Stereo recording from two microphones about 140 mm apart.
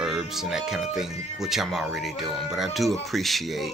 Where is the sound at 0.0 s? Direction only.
5° right (ahead or behind).